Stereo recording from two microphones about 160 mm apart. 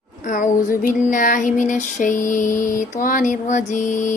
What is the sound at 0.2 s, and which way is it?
Female singing, 55° left (ahead or behind).